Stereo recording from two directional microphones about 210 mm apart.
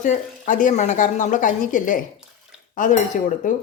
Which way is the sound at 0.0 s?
40° left (ahead or behind).